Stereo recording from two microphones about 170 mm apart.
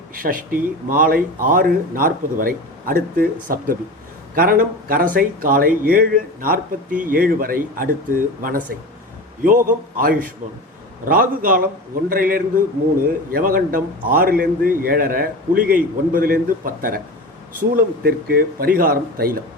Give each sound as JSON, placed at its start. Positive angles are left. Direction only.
{"t": 0.1, "sound": "speech", "side_deg": -55}